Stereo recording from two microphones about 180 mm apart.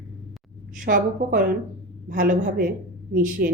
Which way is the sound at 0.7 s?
50° right (ahead or behind).